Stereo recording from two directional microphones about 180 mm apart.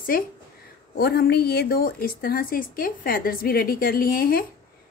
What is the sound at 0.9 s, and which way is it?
A woman's voice, 60° left (ahead or behind).